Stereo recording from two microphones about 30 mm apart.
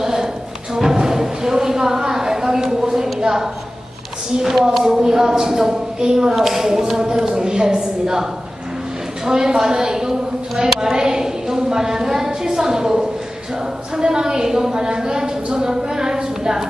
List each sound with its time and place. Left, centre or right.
0.0 s music: centre
1.1 s a sound: centre
4.8 s a woman's voice: centre